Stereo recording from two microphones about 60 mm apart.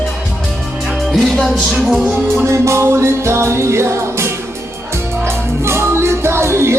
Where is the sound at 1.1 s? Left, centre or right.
Centre.